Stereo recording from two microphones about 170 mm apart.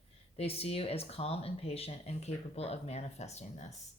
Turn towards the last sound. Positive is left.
turn(degrees=40)  # may be behind; listen again after turning